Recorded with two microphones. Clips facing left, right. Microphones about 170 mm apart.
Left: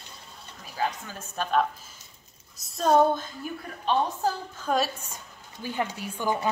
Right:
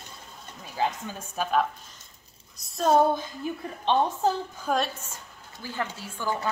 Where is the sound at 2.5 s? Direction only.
Centre (ahead or behind).